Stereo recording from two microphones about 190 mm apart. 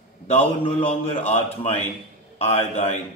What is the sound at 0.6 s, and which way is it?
A man's voice, 30° left (ahead or behind).